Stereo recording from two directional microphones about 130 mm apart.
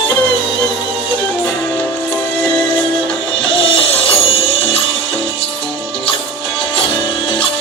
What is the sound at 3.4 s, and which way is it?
Music, 45° left (ahead or behind).